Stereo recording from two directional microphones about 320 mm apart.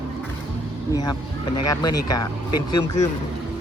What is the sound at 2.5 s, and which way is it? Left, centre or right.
Speech, left.